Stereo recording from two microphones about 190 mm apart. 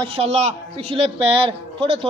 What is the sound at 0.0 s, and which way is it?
A man's voice, 30° right (ahead or behind).